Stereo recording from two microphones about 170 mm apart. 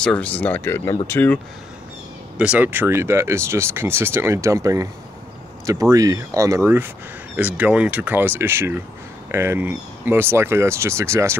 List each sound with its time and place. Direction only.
0.0 s speech: 5° left (ahead or behind)
2.3 s speech: 5° right (ahead or behind)